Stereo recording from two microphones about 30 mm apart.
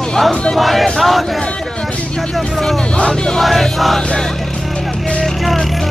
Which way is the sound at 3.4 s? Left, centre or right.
Centre.